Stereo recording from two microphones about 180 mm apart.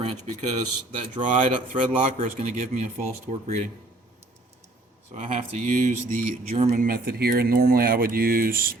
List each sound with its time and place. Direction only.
0.0 s speech: 30° right (ahead or behind)
1.2 s speech: 45° right (ahead or behind)
5.1 s speech: 35° right (ahead or behind); by 8.7 s 55° right (ahead or behind)